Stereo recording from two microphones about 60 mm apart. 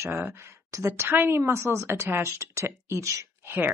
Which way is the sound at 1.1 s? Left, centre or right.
Right.